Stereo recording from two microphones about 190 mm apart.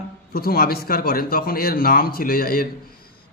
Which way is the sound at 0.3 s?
50° left (ahead or behind).